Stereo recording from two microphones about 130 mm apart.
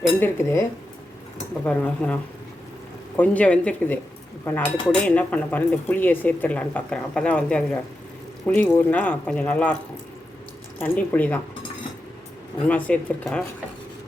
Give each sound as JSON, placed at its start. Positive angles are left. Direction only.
{"t": 0.2, "sound": "speech", "side_deg": 20}
{"t": 1.6, "sound": "speech", "side_deg": 10}
{"t": 3.2, "sound": "speech", "side_deg": 10}
{"t": 10.8, "sound": "speech", "side_deg": 15}
{"t": 12.6, "sound": "speech", "side_deg": 10}